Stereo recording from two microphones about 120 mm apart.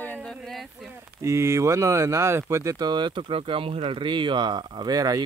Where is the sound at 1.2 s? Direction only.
25° right (ahead or behind).